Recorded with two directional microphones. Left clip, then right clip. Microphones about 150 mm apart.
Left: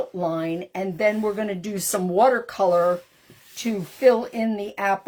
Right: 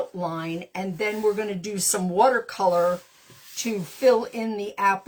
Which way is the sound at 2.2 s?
80° left.